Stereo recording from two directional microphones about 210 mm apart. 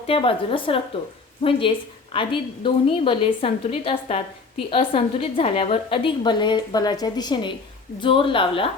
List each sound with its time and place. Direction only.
0.1 s a woman's voice: 25° left (ahead or behind)